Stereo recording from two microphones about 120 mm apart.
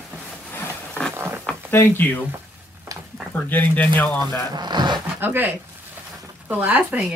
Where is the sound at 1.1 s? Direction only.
20° right (ahead or behind).